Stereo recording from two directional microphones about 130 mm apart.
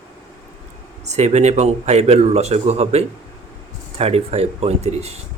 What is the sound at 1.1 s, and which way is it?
A man's voice, 60° right (ahead or behind).